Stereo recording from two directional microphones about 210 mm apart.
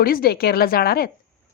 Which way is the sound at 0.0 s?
45° left (ahead or behind).